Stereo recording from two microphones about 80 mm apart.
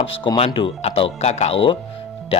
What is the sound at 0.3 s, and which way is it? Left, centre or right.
Speech, left.